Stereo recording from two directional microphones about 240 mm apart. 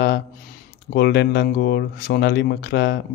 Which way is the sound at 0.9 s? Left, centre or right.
Left.